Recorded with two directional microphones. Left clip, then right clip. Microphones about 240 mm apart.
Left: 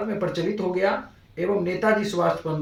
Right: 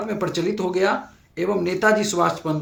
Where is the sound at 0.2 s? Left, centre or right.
Right.